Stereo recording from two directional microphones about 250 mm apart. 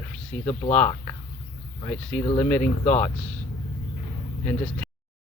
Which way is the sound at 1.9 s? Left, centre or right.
Centre.